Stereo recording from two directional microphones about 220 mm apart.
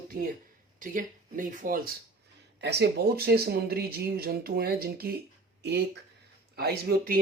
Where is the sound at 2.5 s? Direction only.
50° right (ahead or behind).